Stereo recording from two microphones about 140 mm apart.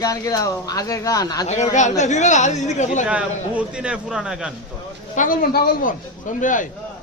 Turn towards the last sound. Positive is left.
turn(degrees=65)  # may be behind; listen again after turning